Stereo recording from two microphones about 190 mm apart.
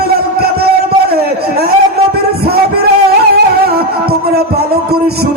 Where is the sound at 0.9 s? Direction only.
55° right (ahead or behind).